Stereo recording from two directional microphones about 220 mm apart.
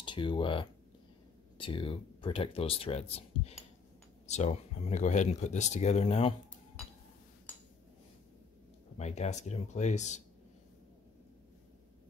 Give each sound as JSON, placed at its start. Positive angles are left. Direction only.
{"t": 0.0, "sound": "speech", "side_deg": 20}
{"t": 8.9, "sound": "speech", "side_deg": 30}